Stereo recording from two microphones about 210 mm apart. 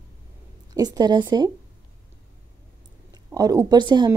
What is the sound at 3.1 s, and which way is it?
Speech, 15° right (ahead or behind).